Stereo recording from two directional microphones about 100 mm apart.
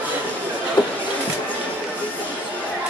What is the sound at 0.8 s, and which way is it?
Music, 50° left (ahead or behind).